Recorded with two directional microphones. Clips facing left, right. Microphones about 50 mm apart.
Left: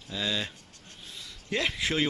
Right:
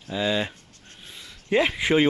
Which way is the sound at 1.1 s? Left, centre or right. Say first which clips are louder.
Right 9 dB; right.